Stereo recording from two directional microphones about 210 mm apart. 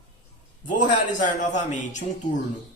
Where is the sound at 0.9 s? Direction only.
35° left (ahead or behind).